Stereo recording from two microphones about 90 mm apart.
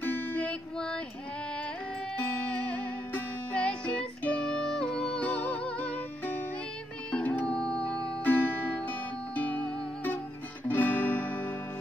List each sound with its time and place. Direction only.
0.0 s music: 20° left (ahead or behind)
2.3 s music: 20° left (ahead or behind)